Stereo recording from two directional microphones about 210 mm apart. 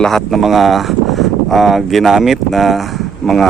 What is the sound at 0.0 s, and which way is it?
Speech, centre (ahead or behind).